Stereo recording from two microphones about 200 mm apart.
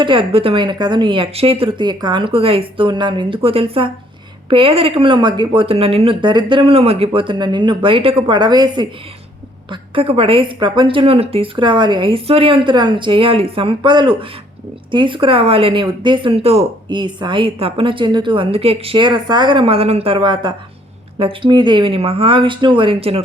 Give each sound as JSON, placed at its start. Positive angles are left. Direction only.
{"t": 0.0, "sound": "a woman's voice", "side_deg": -25}